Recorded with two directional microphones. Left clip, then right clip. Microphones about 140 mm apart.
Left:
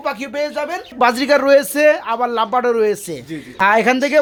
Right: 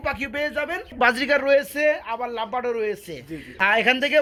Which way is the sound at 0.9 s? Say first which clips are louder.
Left 6 dB; 20° left (ahead or behind).